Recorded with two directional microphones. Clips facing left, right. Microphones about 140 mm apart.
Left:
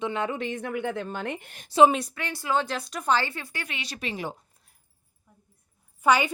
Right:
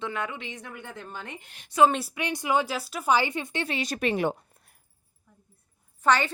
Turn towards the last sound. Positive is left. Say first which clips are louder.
# left 1 dB
turn(degrees=10)  # may be behind; listen again after turning